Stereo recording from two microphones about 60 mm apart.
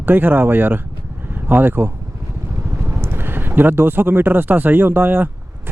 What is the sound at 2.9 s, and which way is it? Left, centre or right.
Speech, right.